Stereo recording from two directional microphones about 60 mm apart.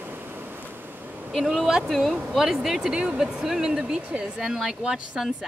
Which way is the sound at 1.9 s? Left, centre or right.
Centre.